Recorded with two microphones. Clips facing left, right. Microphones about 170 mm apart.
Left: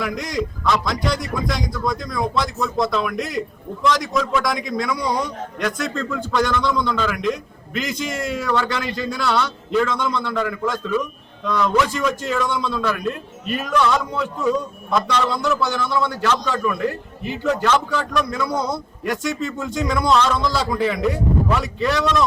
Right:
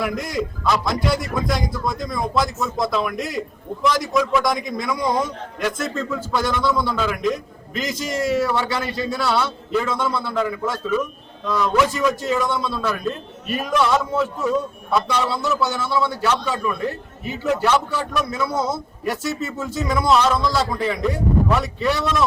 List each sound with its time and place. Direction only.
0.0 s a man's voice: 5° right (ahead or behind)
7.7 s a man's voice: 45° right (ahead or behind)
8.2 s a man's voice: centre (ahead or behind)
17.4 s a man's voice: 5° right (ahead or behind)